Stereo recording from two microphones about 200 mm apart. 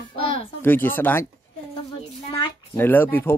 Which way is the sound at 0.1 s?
30° left (ahead or behind).